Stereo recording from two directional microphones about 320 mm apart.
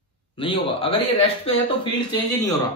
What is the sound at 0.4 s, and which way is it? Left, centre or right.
A man's voice, centre.